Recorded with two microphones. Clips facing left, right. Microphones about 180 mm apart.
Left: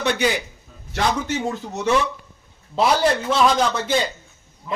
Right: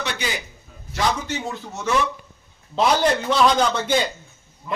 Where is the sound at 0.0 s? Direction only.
60° left (ahead or behind).